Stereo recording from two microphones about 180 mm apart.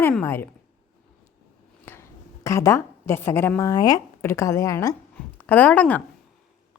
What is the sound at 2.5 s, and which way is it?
A woman's voice, 15° left (ahead or behind).